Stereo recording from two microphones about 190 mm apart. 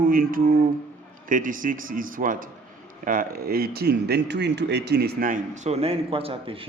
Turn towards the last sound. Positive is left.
turn(degrees=-30)  # may be behind; listen again after turning